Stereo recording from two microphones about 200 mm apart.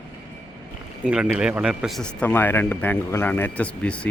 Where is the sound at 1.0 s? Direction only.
5° right (ahead or behind).